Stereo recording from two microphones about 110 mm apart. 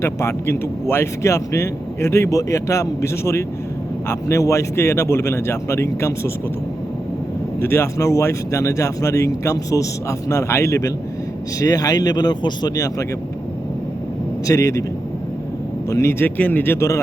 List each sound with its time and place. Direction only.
0.0 s speech: 25° left (ahead or behind)
7.6 s speech: 20° left (ahead or behind)
14.4 s speech: 30° left (ahead or behind)
15.9 s speech: 25° left (ahead or behind)